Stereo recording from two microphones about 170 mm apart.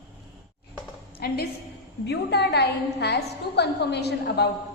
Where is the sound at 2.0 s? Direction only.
80° left.